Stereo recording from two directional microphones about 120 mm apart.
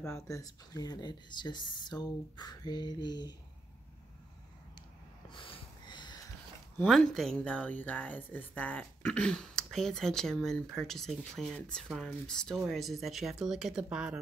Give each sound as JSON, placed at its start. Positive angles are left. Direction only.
{"t": 0.1, "sound": "speech", "side_deg": 25}
{"t": 5.3, "sound": "a sound", "side_deg": 45}
{"t": 6.9, "sound": "speech", "side_deg": 5}